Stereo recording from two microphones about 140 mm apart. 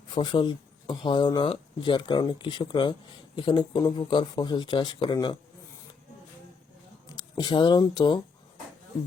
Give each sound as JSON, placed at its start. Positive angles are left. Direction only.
{"t": 0.1, "sound": "speech", "side_deg": 30}
{"t": 7.1, "sound": "speech", "side_deg": 30}